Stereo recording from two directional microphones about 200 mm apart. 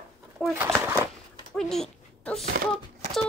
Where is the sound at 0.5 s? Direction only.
10° right (ahead or behind).